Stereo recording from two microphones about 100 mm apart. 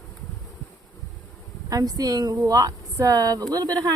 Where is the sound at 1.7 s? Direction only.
40° right (ahead or behind).